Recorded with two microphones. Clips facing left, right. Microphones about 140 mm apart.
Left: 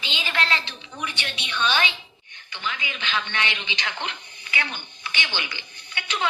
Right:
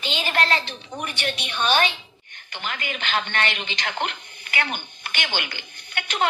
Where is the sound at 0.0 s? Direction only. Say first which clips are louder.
Right 4 dB; 50° right (ahead or behind).